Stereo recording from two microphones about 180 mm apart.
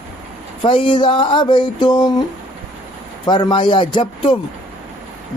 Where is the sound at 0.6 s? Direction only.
30° left (ahead or behind).